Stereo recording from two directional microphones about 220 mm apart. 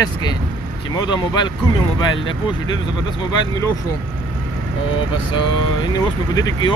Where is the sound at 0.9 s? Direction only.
20° left (ahead or behind).